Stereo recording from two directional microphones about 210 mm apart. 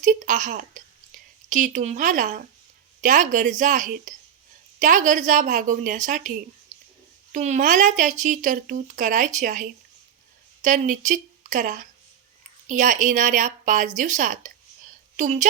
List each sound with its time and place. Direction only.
0.0 s speech: 35° right (ahead or behind)
7.3 s a woman's voice: 35° right (ahead or behind)